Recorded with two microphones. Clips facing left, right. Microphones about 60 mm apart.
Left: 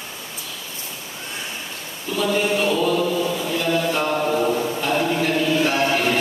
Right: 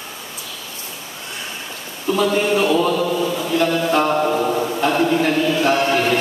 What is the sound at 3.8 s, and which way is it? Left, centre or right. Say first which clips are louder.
Mantra: right 5 dB; right.